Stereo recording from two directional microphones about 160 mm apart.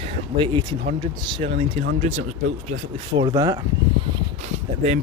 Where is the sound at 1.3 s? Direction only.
40° right (ahead or behind).